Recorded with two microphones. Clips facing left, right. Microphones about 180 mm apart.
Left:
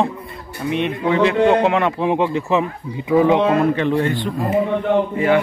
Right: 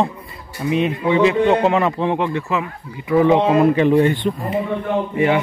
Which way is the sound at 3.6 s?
10° right (ahead or behind).